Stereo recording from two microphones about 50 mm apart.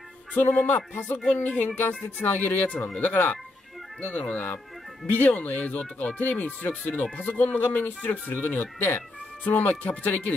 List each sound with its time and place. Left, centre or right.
0.4 s speech: left
1.4 s speech: left
9.4 s speech: left